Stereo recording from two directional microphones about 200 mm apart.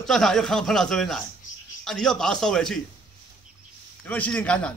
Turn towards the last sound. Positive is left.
turn(degrees=5)  # may be behind; listen again after turning